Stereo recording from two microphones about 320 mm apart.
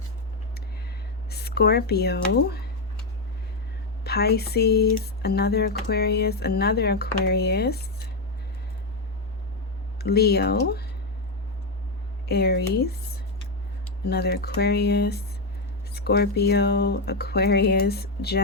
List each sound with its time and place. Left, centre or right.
1.3 s speech: left
4.0 s speech: left
10.0 s speech: left
12.3 s speech: left
14.1 s speech: left